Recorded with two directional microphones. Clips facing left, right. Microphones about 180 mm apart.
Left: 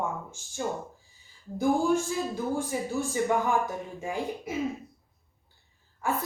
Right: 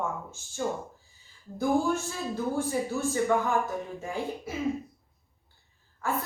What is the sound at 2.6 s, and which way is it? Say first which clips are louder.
Speech: right 1 dB; 15° left (ahead or behind).